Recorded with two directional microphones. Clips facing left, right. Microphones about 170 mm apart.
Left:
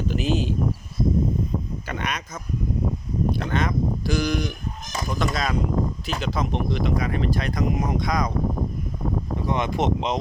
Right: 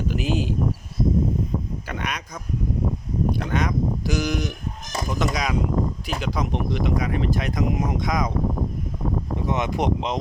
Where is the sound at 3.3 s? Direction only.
10° right (ahead or behind).